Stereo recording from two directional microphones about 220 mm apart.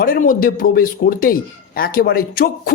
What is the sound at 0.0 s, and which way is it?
A woman's voice, 40° left (ahead or behind).